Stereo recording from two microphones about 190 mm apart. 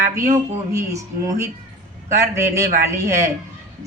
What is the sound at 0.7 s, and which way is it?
Speech, 15° right (ahead or behind).